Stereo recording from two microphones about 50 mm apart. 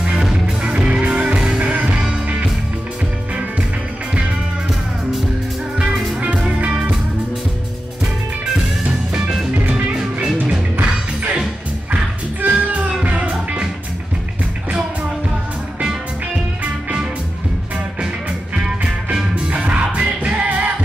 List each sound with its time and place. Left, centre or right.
0.6 s music: right
6.6 s music: right
11.9 s music: right
19.3 s music: right